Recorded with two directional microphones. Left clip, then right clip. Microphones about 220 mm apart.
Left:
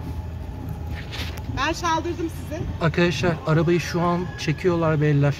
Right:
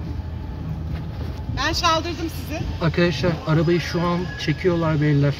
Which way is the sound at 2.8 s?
15° left (ahead or behind).